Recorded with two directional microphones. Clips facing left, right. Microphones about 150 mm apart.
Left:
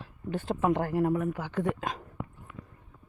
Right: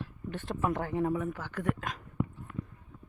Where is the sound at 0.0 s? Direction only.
35° left (ahead or behind).